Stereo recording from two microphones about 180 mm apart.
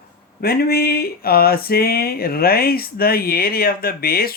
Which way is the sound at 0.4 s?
60° left (ahead or behind).